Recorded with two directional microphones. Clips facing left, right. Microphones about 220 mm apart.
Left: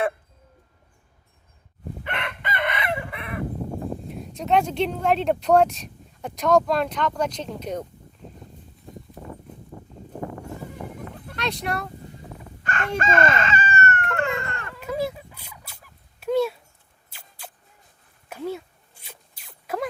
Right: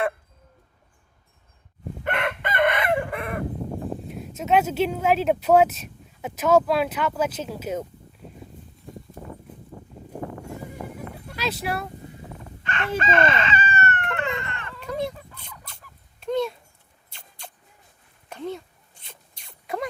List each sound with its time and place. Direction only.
2.0 s chicken: 50° right (ahead or behind)
4.1 s speech: centre (ahead or behind)
11.3 s speech: 5° right (ahead or behind)
12.6 s speech: 45° left (ahead or behind)
13.0 s chicken: 45° left (ahead or behind)
14.3 s a sound: 45° left (ahead or behind)
14.7 s a sound: 5° left (ahead or behind)
17.1 s rodents: 5° left (ahead or behind)
18.3 s a sound: 5° left (ahead or behind)